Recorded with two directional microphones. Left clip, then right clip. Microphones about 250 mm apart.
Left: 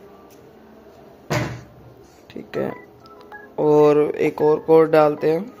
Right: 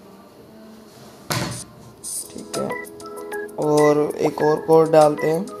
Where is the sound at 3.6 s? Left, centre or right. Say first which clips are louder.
Left 2 dB; centre.